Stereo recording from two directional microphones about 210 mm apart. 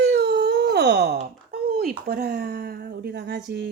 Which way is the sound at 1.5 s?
45° right (ahead or behind).